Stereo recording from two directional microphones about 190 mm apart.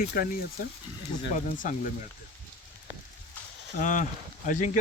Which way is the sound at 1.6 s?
45° left (ahead or behind).